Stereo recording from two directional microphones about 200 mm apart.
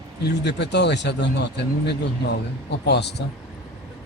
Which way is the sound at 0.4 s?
60° left (ahead or behind).